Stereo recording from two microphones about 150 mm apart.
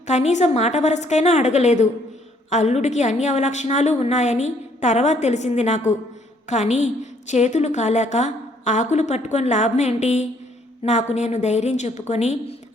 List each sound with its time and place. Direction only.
0.1 s a woman's voice: 50° left (ahead or behind)